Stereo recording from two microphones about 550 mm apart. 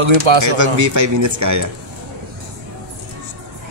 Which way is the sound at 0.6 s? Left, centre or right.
Right.